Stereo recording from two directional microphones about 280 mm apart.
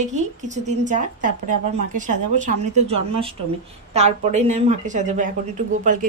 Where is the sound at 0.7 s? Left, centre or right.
Right.